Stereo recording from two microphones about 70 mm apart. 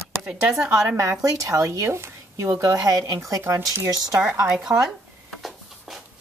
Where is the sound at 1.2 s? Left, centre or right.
Right.